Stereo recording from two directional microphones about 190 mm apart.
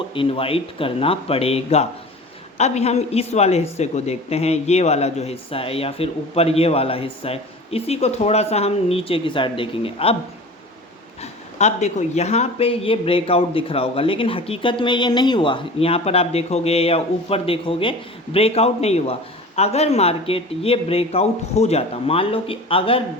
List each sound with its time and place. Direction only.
0.1 s speech: 30° left (ahead or behind)
11.2 s speech: 35° left (ahead or behind)